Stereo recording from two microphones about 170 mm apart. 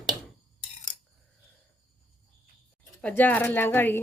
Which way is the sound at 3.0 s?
10° left (ahead or behind).